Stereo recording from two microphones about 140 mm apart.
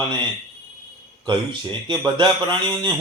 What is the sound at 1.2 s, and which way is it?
Speech, 35° right (ahead or behind).